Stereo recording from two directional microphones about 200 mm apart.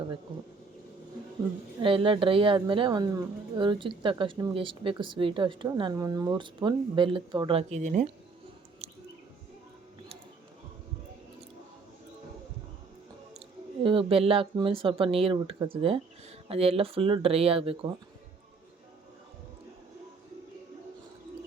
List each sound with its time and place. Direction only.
1.8 s speech: 25° right (ahead or behind)
13.8 s speech: 25° right (ahead or behind)